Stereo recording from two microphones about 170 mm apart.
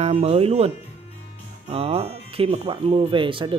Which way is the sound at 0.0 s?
35° right (ahead or behind).